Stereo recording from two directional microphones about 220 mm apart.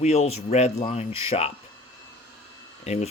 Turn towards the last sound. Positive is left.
turn(degrees=30)  # may be behind; listen again after turning